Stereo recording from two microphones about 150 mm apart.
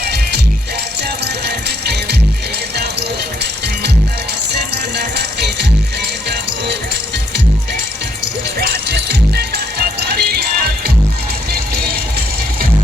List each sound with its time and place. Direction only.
1.0 s music: 90° right
4.9 s music: 90° right
8.6 s music: 90° right